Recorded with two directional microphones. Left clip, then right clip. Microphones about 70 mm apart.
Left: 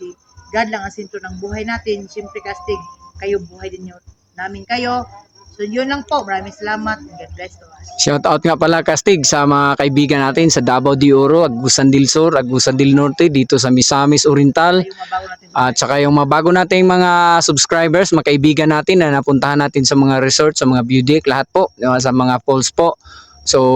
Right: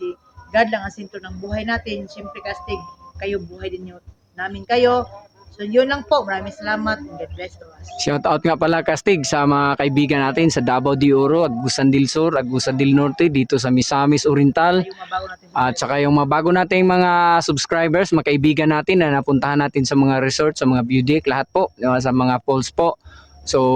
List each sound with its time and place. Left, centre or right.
0.5 s speech: right
4.4 s speech: right
7.9 s speech: left
23.5 s speech: left